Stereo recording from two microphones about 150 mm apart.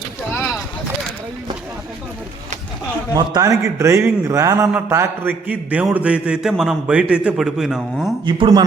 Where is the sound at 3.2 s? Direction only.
25° right (ahead or behind); by 8.1 s 5° right (ahead or behind).